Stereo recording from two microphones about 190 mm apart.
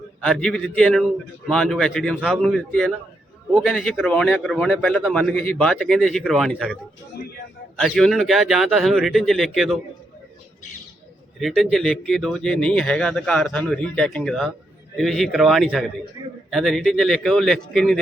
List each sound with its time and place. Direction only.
0.2 s speech: 5° left (ahead or behind)
7.8 s speech: centre (ahead or behind)
11.3 s speech: centre (ahead or behind)